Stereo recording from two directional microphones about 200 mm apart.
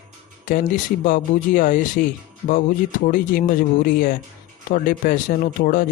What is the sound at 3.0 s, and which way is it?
Speech, 45° left (ahead or behind).